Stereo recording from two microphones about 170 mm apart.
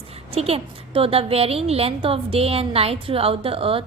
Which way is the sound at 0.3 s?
35° right (ahead or behind).